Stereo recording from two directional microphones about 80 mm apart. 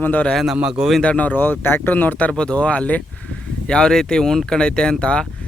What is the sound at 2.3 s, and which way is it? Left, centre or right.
Speech, centre.